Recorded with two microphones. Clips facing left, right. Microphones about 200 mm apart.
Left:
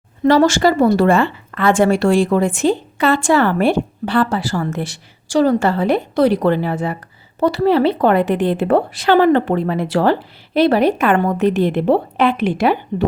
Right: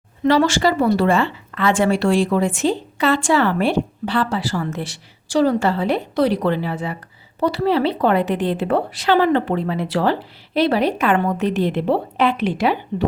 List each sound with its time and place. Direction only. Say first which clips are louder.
0.3 s speech: left 4 dB; 45° left (ahead or behind)